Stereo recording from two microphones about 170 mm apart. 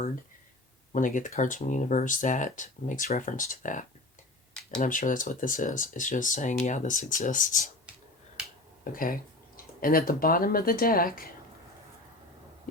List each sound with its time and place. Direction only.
0.9 s speech: 50° left (ahead or behind)
8.8 s speech: 55° left (ahead or behind)